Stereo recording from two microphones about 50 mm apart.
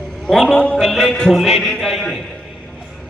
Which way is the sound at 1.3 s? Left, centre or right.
Centre.